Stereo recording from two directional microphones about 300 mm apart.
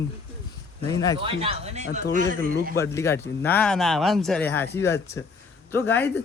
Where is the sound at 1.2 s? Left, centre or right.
Centre.